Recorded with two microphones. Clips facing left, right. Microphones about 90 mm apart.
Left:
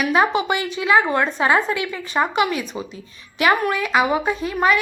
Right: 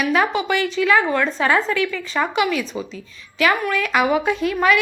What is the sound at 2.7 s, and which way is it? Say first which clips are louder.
Speech: right 2 dB; 15° left (ahead or behind).